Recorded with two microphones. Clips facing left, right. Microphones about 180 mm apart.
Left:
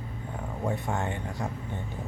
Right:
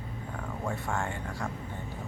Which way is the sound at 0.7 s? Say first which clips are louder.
Left 3 dB; 20° left (ahead or behind).